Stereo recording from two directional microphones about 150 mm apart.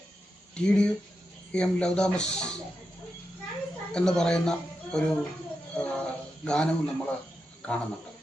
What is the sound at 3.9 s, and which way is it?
Speech, 5° left (ahead or behind).